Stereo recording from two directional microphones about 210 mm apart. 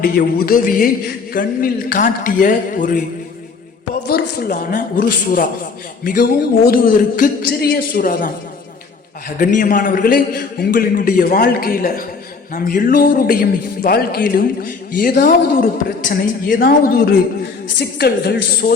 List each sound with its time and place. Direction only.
0.0 s a man's voice: 45° left (ahead or behind)
4.1 s a man's voice: 45° left (ahead or behind)
6.7 s a man's voice: 40° left (ahead or behind)
9.4 s a man's voice: 40° left (ahead or behind)